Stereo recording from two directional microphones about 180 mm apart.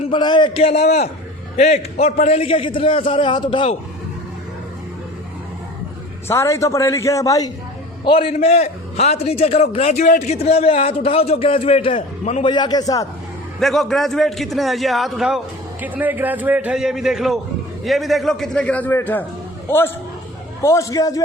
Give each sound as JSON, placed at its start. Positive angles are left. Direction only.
{"t": 0.0, "sound": "a man's voice", "side_deg": 25}
{"t": 6.2, "sound": "a man's voice", "side_deg": 15}
{"t": 8.0, "sound": "a man's voice", "side_deg": 30}
{"t": 12.5, "sound": "a man's voice", "side_deg": 25}
{"t": 13.6, "sound": "a man's voice", "side_deg": 0}